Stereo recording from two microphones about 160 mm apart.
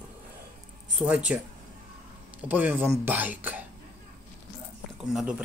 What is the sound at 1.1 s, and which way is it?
Speech, 5° right (ahead or behind).